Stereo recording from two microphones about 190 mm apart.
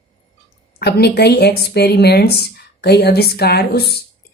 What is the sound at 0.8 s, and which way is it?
Speech, 60° left (ahead or behind).